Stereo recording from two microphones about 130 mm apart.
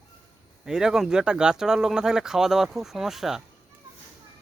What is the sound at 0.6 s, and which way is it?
A man's voice, 5° right (ahead or behind).